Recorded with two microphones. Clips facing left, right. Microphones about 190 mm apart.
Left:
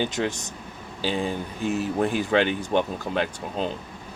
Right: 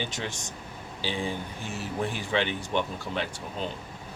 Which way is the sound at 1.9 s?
45° left (ahead or behind).